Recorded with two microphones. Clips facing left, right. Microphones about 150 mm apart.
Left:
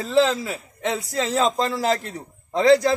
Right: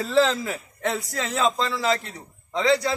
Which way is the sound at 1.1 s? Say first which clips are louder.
Left 5 dB; 30° left (ahead or behind).